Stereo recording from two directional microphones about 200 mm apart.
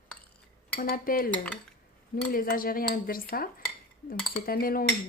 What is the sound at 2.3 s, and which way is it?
Speech, 45° left (ahead or behind).